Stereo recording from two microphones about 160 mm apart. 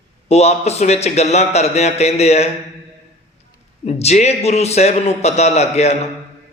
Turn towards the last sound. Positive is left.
turn(degrees=40)  # may be behind; listen again after turning